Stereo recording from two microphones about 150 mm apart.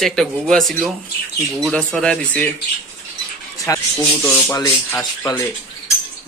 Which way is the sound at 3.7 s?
15° left (ahead or behind).